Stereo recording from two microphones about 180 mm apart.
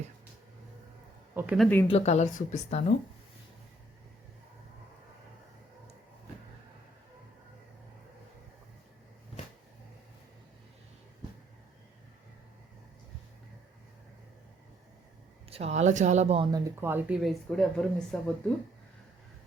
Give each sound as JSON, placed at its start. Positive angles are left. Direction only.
{"t": 1.3, "sound": "a sound", "side_deg": -10}
{"t": 1.5, "sound": "speech", "side_deg": 5}
{"t": 1.9, "sound": "a woman's voice", "side_deg": 35}
{"t": 15.4, "sound": "speech", "side_deg": -35}
{"t": 16.5, "sound": "speech", "side_deg": -20}